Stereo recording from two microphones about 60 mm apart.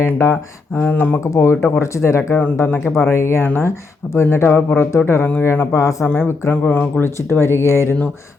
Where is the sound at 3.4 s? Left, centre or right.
Left.